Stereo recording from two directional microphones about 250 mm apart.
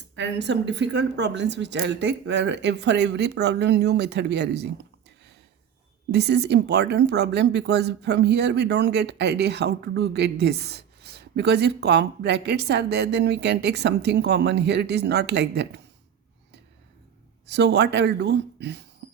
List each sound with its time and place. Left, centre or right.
0.2 s a woman's voice: right
6.1 s speech: right
17.5 s a woman's voice: right